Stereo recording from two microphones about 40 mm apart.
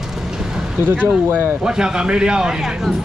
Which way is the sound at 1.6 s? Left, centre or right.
Centre.